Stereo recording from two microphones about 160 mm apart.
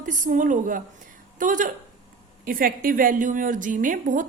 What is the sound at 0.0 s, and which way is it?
A woman's voice, 55° right (ahead or behind).